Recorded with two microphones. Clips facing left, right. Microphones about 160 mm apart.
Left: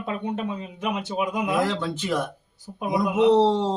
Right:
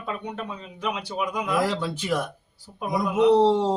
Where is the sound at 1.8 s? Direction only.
5° right (ahead or behind).